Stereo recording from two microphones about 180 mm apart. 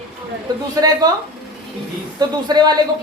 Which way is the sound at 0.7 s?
20° right (ahead or behind).